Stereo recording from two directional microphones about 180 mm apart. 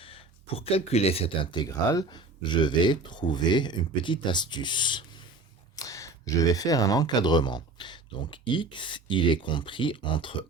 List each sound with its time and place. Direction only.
0.0 s speech: 30° left (ahead or behind)